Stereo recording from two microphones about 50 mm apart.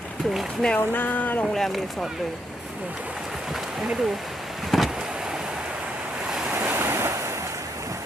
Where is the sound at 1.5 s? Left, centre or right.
Centre.